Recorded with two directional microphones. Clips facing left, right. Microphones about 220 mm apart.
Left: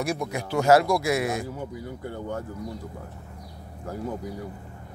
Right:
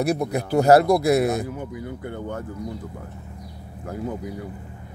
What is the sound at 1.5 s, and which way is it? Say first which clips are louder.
Speech: right 3 dB; 20° right (ahead or behind).